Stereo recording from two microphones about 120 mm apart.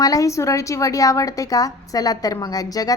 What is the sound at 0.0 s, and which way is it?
A woman's voice, 30° left (ahead or behind).